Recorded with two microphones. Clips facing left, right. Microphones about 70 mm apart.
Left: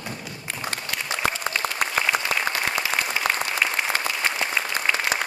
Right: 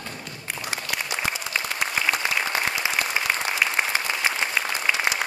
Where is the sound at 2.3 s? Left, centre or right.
Left.